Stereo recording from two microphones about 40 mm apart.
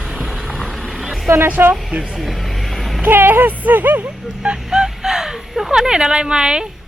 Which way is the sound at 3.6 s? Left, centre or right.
Right.